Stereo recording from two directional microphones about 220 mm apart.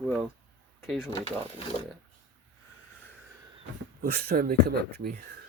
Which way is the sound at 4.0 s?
40° right (ahead or behind).